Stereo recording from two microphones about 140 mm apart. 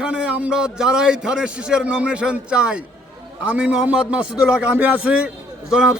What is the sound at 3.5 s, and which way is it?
Battle cry, 10° right (ahead or behind).